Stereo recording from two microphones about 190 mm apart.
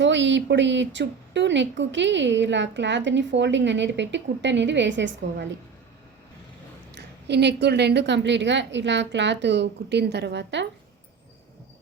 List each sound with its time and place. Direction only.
0.0 s a woman's voice: 70° right (ahead or behind)
6.9 s a woman's voice: 60° right (ahead or behind)